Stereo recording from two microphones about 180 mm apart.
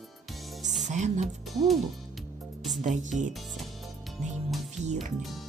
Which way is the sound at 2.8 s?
45° right (ahead or behind).